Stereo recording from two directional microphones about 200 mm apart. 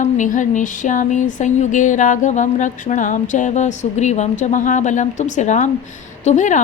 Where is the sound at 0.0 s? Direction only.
40° left (ahead or behind).